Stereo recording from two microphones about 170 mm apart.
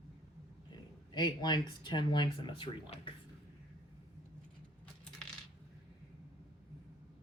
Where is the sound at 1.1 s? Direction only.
25° left (ahead or behind).